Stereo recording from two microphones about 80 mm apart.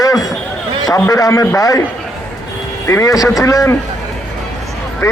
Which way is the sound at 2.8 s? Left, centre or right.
Left.